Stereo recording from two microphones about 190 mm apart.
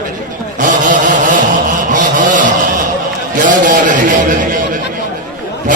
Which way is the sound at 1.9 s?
45° right (ahead or behind).